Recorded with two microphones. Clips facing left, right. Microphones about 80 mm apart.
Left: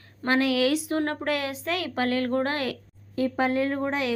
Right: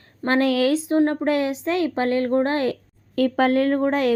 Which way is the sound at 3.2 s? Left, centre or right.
Right.